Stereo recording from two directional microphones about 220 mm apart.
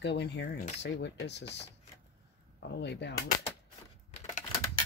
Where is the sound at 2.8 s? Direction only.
50° left (ahead or behind).